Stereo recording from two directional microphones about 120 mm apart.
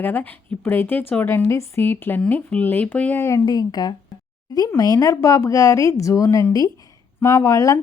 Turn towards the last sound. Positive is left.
turn(degrees=25)  # may be behind; listen again after turning